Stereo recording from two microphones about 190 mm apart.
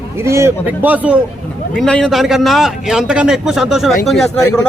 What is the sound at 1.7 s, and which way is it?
A man's voice, 5° left (ahead or behind).